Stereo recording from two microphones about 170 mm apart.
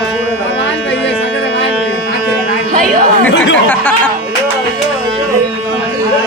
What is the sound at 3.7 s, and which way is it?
Chatter, 10° left (ahead or behind).